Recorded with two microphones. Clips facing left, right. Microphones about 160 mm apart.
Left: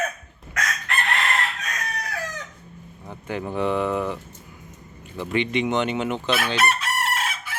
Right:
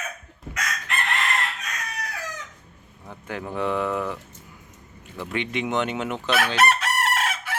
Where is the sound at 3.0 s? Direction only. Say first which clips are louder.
Left 3 dB; centre (ahead or behind).